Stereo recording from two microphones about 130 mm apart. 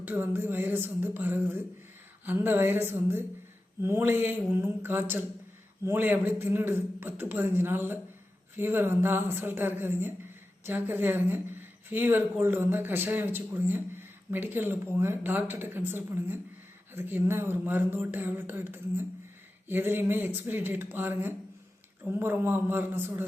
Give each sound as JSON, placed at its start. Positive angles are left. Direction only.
{"t": 0.0, "sound": "speech", "side_deg": -15}